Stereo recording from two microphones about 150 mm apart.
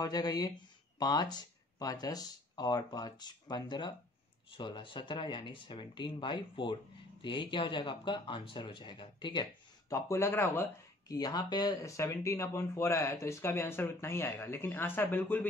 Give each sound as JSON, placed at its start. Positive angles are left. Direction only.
{"t": 0.0, "sound": "speech", "side_deg": 25}